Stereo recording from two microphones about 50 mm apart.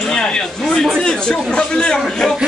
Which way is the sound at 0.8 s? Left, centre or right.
Centre.